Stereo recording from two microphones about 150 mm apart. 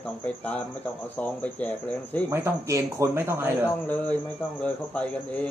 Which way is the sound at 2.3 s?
15° right (ahead or behind).